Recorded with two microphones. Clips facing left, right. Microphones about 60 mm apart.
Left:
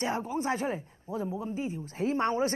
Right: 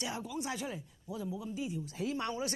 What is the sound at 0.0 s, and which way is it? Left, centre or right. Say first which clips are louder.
Speech: left 8 dB; left.